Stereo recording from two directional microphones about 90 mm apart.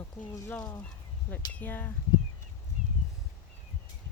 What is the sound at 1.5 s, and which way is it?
Speech, 20° left (ahead or behind).